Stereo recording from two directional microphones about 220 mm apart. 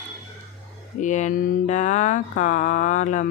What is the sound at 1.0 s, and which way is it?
Speech, 35° left (ahead or behind).